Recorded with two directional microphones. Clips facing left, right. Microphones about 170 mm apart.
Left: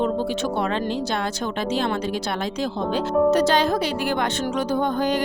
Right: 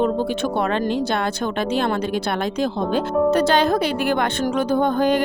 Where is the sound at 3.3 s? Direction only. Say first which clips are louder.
Right 2 dB; 60° right (ahead or behind).